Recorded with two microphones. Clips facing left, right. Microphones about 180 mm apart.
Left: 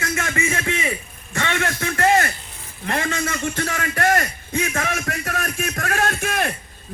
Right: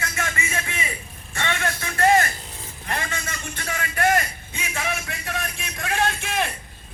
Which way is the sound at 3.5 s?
45° left (ahead or behind).